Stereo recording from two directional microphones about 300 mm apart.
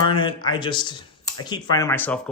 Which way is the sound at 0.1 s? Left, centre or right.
Centre.